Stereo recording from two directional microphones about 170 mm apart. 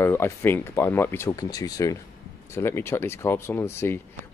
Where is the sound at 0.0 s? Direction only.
15° left (ahead or behind).